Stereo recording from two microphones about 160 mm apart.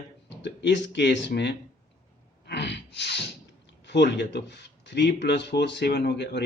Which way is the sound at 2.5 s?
90° left.